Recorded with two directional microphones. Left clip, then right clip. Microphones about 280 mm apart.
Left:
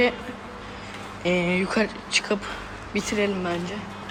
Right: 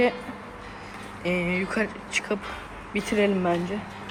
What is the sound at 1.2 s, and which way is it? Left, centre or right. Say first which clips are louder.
Speech: left 3 dB; centre.